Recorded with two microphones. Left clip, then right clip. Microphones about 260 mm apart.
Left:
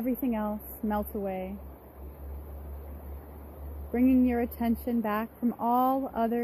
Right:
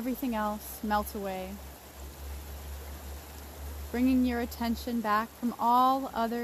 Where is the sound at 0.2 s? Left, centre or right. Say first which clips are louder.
Even; left.